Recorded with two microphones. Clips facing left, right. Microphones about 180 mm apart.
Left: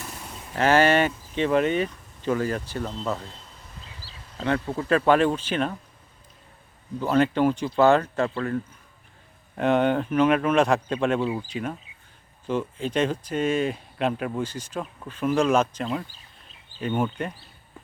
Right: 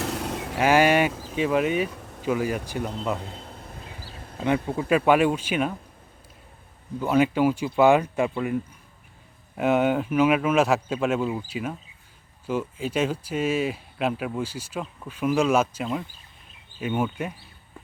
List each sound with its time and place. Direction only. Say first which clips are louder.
0.0 s vehicle: right 11 dB; 80° right
0.5 s speech: even; 10° right (ahead or behind)
1.1 s speech: right 9 dB; 90° right
1.4 s speech: left 1 dB; 5° right (ahead or behind)
1.9 s a sound: right 9 dB; 70° right (ahead or behind)
2.2 s speech: even; 10° right (ahead or behind)
3.2 s a sound: right 5 dB; 60° right (ahead or behind)
4.4 s speech: right 1 dB; 15° right (ahead or behind)
7.0 s speech: even; 10° right (ahead or behind)